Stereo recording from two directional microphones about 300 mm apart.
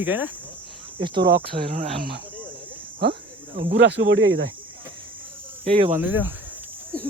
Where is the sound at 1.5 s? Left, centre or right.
Right.